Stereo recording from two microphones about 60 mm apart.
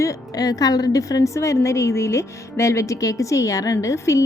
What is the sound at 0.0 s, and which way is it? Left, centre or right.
A woman's voice, left.